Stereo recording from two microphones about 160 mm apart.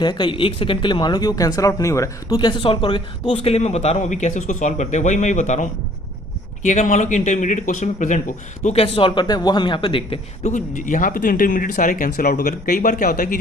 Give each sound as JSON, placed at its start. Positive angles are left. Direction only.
{"t": 0.0, "sound": "speech", "side_deg": 30}
{"t": 10.5, "sound": "speech", "side_deg": 50}